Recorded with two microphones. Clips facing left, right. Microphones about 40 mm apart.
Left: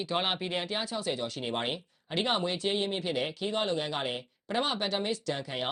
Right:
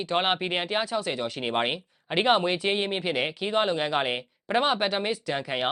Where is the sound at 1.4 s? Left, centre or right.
Right.